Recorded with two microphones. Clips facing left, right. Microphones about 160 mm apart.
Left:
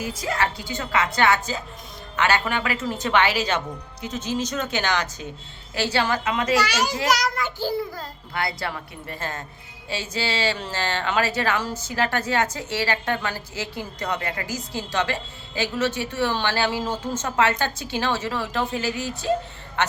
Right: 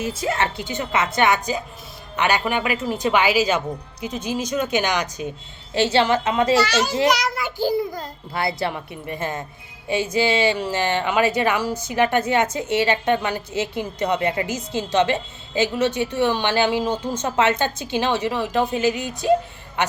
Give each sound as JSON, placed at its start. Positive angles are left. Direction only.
{"t": 0.0, "sound": "speech", "side_deg": -25}
{"t": 6.6, "sound": "a child's voice", "side_deg": 10}
{"t": 7.1, "sound": "child singing", "side_deg": -5}
{"t": 8.3, "sound": "speech", "side_deg": -25}